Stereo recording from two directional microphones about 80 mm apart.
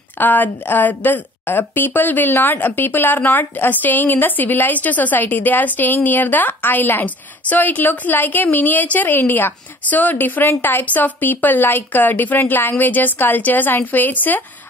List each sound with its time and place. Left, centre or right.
0.2 s a woman's voice: left